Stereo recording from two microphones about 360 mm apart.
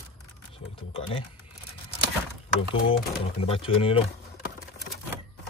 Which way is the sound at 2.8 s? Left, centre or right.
Centre.